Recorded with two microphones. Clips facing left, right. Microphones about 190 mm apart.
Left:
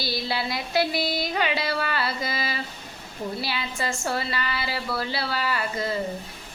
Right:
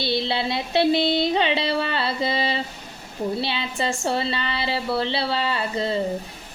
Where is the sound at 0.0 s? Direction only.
25° right (ahead or behind).